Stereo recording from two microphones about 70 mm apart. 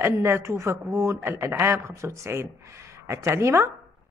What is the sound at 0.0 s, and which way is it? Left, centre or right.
Speech, right.